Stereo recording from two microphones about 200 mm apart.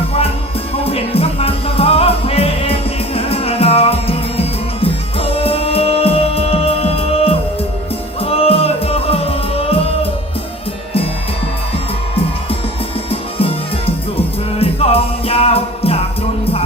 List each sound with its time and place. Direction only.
0.9 s music: 30° left (ahead or behind)
14.6 s music: 30° left (ahead or behind)